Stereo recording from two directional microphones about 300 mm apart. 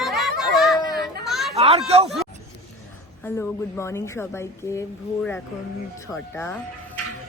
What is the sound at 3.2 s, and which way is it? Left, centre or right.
Speech, centre.